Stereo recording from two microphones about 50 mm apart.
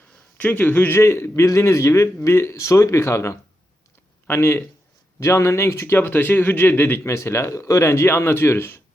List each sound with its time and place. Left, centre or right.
0.3 s a man's voice: left
0.9 s a man's voice: left
4.3 s a man's voice: left
5.2 s a man's voice: left
6.1 s a man's voice: left
7.0 s a man's voice: left